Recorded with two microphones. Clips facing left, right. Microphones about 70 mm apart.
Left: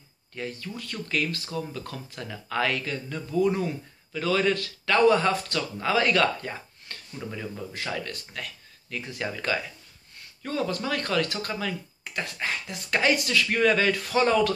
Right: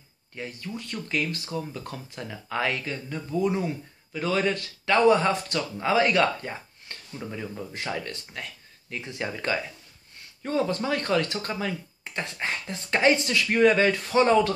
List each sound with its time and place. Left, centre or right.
0.3 s speech: right
7.2 s speech: centre
7.7 s speech: right